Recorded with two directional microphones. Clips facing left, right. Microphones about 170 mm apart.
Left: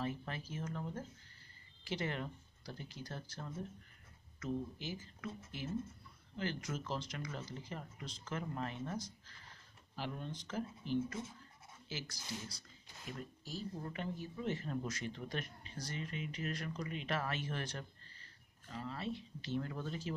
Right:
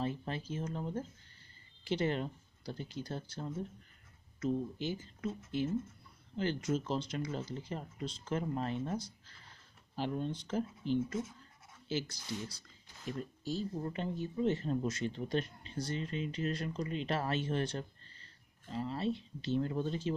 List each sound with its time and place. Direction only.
0.0 s speech: 25° right (ahead or behind)
13.4 s speech: 30° right (ahead or behind)